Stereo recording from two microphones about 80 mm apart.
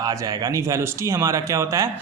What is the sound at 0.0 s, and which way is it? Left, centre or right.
Speech, right.